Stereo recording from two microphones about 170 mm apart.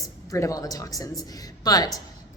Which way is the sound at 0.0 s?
20° left (ahead or behind).